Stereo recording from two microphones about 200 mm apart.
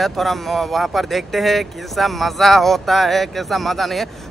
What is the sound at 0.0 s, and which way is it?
Speech, centre (ahead or behind).